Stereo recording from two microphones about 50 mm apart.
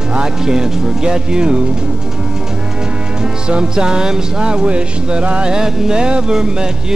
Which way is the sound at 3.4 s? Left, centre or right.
Centre.